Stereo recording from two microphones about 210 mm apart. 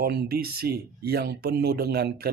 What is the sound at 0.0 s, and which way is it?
Speech, 50° right (ahead or behind).